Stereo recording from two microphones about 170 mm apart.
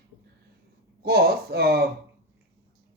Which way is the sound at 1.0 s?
65° right (ahead or behind).